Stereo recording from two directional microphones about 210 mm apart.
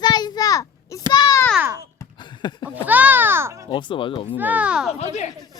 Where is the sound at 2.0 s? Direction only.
20° left (ahead or behind).